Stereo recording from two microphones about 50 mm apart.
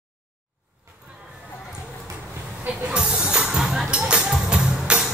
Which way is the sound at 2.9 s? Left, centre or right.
Centre.